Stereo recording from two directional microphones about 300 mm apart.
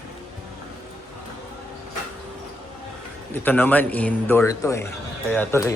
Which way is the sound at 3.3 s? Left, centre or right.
Centre.